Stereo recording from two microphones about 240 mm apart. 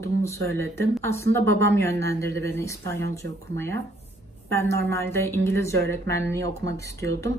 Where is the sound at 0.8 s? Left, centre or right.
Centre.